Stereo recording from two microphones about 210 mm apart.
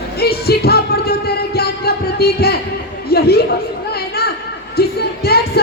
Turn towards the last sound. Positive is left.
turn(degrees=50)  # may be behind; listen again after turning